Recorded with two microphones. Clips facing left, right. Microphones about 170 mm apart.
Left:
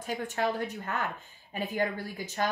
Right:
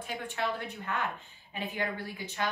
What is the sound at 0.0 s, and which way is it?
A woman's voice, 40° left (ahead or behind).